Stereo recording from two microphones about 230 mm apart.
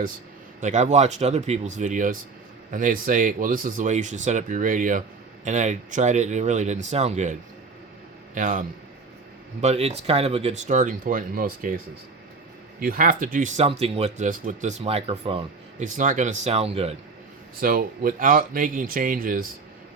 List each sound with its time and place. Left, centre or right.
0.6 s speech: right
8.4 s speech: right
12.8 s speech: right
17.6 s speech: right